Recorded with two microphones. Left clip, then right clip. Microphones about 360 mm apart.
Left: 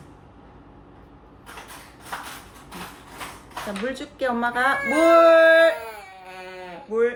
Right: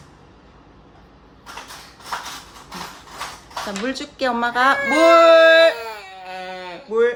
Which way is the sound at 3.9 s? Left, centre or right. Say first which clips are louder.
Right 3 dB; right.